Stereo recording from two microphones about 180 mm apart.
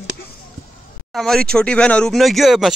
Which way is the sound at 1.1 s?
Centre (ahead or behind).